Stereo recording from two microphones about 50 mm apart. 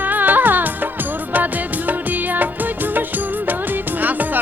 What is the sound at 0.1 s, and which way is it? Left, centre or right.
Music, right.